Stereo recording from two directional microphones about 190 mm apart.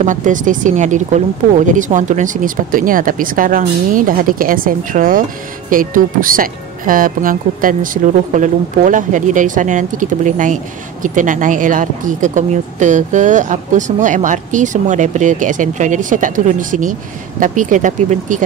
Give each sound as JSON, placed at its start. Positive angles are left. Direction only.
{"t": 0.0, "sound": "speech", "side_deg": -40}